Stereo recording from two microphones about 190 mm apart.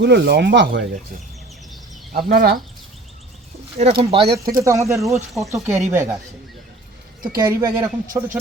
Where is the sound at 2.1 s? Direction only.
50° right (ahead or behind).